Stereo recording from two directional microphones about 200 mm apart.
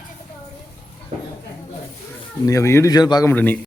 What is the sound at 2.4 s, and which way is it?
Speech, 15° left (ahead or behind).